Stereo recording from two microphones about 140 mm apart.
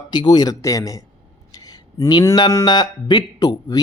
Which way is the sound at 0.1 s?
30° left (ahead or behind).